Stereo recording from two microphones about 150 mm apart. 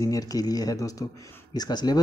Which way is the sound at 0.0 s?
25° left (ahead or behind).